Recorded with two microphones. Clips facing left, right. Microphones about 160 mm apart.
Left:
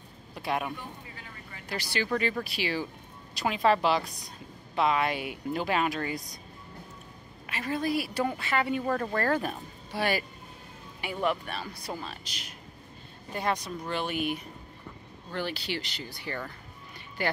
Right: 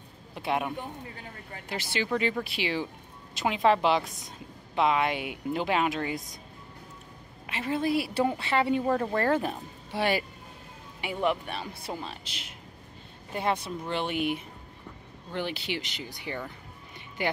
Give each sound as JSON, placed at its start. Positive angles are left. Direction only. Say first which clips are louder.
{"t": 0.3, "sound": "a sound", "louder": "right 2 dB", "side_deg": -20}
{"t": 1.7, "sound": "a woman's voice", "louder": "even", "side_deg": -20}
{"t": 7.4, "sound": "a woman's voice", "louder": "right 2 dB", "side_deg": -25}